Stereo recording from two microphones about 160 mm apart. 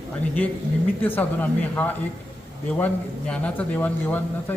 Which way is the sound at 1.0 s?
10° left (ahead or behind).